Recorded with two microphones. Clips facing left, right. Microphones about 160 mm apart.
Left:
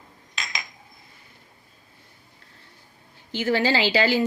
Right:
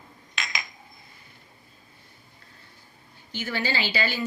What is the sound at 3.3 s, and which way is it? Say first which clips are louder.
Speech: left 8 dB; 90° left.